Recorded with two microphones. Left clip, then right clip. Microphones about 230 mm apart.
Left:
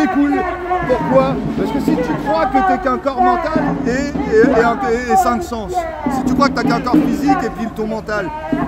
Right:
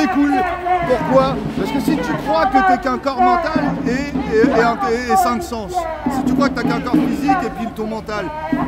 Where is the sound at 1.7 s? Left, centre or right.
Centre.